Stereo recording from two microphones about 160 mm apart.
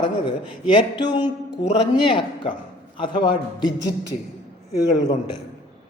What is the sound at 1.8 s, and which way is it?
A man's voice, 30° left (ahead or behind).